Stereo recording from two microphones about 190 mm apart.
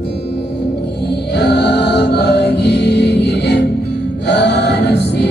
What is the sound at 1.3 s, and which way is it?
Music, 65° left (ahead or behind).